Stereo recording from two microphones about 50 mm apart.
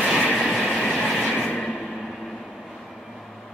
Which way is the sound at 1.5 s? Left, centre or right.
Centre.